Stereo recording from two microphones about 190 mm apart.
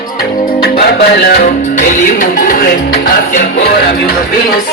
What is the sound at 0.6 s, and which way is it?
Music, 55° left (ahead or behind).